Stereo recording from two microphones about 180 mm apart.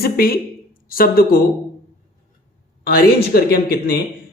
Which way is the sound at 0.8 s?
55° left (ahead or behind).